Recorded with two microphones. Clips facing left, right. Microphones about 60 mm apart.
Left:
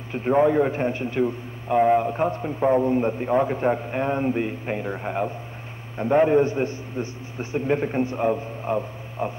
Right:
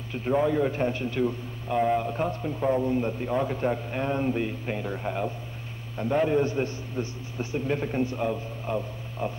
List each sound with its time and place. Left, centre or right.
0.1 s a man's voice: left